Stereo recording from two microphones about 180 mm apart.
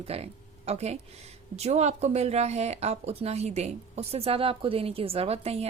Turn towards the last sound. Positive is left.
turn(degrees=-35)  # may be behind; listen again after turning